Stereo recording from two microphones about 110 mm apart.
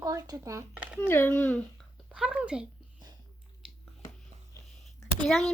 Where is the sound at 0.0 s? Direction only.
35° right (ahead or behind).